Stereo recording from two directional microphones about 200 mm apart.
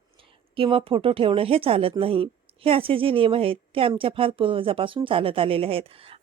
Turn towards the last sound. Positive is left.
turn(degrees=-30)  # may be behind; listen again after turning